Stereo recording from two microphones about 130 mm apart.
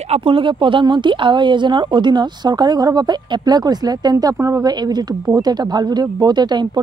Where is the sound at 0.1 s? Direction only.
45° right (ahead or behind).